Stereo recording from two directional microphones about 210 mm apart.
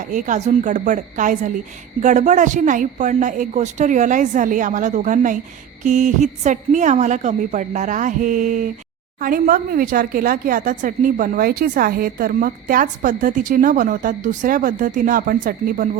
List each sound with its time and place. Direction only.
0.1 s speech: 35° right (ahead or behind)